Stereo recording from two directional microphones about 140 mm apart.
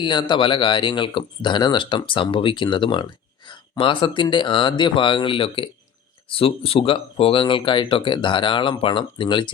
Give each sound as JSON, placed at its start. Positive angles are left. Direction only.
{"t": 0.0, "sound": "speech", "side_deg": 35}